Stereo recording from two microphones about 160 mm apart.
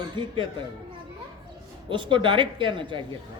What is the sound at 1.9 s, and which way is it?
A man's voice, 30° right (ahead or behind).